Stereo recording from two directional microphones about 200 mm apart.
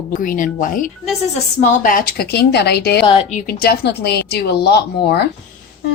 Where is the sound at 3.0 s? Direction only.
30° left (ahead or behind); by 5.2 s 55° left (ahead or behind).